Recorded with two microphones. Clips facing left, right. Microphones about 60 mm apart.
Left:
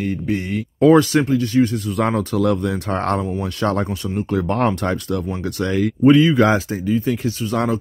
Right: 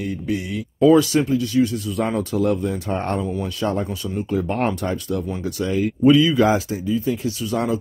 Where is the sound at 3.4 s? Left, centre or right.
Left.